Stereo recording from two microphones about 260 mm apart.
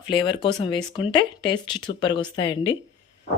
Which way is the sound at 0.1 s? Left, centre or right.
Centre.